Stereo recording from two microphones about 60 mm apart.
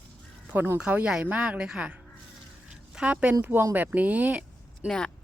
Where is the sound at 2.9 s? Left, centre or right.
Right.